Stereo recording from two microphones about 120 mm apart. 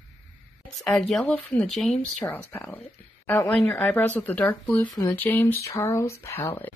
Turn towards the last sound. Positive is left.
turn(degrees=15)  # may be behind; listen again after turning